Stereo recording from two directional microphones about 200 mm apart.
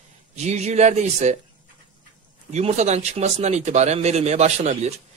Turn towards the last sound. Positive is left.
turn(degrees=-35)  # may be behind; listen again after turning